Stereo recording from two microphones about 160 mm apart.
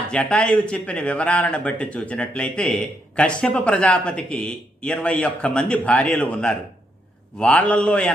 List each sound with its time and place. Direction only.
0.1 s a man's voice: 5° left (ahead or behind)